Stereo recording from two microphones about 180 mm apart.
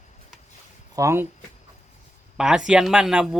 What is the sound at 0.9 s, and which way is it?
Speech, 15° right (ahead or behind).